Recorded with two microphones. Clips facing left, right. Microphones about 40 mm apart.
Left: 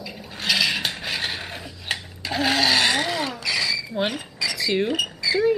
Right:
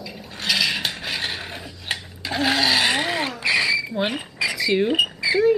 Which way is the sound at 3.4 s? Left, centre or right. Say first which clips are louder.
Right 8 dB; right.